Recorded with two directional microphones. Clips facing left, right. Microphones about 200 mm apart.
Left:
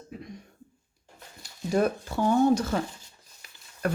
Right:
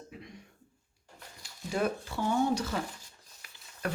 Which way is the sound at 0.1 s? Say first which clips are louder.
Left 9 dB; 40° left (ahead or behind).